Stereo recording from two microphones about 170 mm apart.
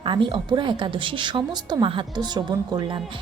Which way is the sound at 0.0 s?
30° right (ahead or behind).